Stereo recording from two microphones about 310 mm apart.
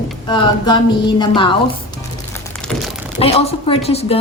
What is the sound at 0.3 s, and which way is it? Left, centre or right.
A woman's voice, centre.